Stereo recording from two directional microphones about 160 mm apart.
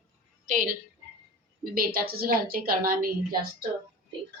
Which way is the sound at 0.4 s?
55° right (ahead or behind).